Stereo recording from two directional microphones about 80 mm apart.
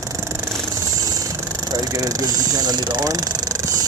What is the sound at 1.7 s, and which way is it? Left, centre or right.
Speech, right.